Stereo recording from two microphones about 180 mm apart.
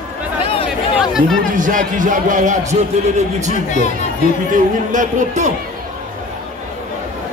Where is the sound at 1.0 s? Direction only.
Centre (ahead or behind).